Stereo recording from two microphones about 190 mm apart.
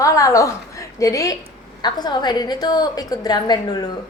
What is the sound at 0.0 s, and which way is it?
A woman's voice, 15° left (ahead or behind).